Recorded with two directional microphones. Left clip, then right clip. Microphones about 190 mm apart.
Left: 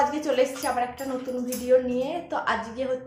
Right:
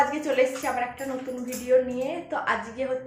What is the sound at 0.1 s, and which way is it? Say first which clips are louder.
A woman's voice: even; 15° left (ahead or behind).